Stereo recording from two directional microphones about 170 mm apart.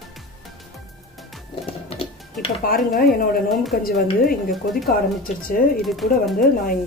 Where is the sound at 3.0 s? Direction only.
65° left (ahead or behind).